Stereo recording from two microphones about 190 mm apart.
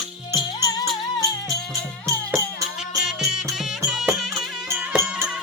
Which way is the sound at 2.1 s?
15° right (ahead or behind).